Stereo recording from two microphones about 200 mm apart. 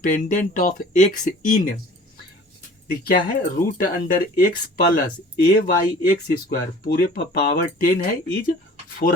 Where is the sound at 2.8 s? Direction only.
45° left (ahead or behind).